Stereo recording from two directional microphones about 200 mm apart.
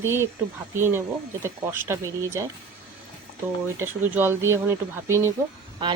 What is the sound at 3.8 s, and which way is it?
Speech, 10° right (ahead or behind).